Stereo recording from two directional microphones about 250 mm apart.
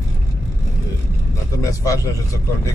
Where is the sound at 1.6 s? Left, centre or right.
Centre.